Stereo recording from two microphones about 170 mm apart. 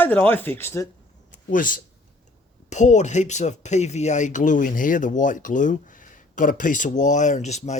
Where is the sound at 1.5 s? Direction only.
50° left (ahead or behind).